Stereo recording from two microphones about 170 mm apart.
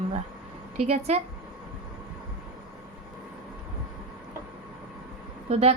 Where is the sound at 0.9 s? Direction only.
40° right (ahead or behind).